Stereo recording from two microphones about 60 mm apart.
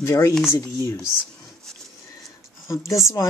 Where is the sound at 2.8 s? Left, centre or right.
Left.